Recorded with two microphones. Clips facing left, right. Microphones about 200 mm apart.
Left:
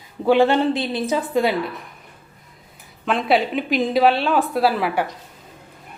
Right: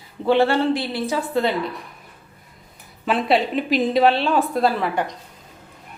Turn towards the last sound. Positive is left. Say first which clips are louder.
# left 1 dB
turn(degrees=5)  # may be behind; listen again after turning